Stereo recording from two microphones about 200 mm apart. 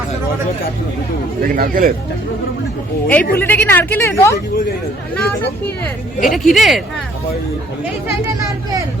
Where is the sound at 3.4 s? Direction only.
10° left (ahead or behind).